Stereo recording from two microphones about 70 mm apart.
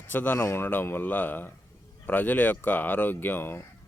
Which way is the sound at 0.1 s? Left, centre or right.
Left.